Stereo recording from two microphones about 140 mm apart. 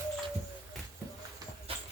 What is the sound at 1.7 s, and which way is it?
Clip-clop, 40° right (ahead or behind).